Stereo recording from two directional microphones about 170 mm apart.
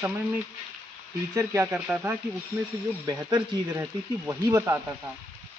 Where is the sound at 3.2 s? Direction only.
25° right (ahead or behind).